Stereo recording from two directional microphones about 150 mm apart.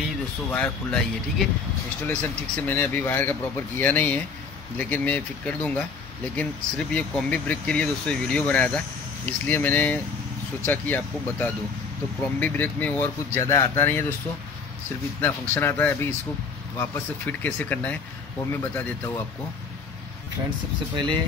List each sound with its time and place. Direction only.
0.5 s speech: 10° left (ahead or behind)
2.0 s speech: 10° left (ahead or behind)
15.1 s speech: 15° left (ahead or behind)